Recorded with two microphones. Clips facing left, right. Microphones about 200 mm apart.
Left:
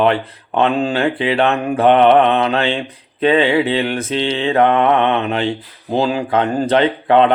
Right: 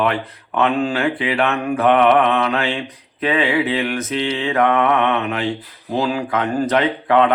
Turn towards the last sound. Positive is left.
turn(degrees=30)  # may be behind; listen again after turning